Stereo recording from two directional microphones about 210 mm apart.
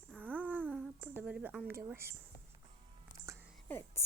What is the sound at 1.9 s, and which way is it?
Speech, 10° right (ahead or behind).